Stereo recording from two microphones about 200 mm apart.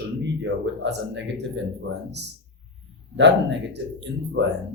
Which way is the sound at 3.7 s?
60° right (ahead or behind).